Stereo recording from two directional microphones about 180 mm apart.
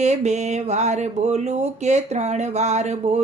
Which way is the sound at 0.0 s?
40° right (ahead or behind).